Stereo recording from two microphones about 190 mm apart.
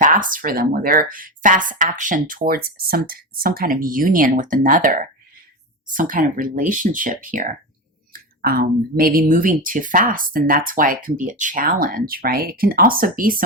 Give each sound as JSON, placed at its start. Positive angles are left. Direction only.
{"t": 0.0, "sound": "speech", "side_deg": -45}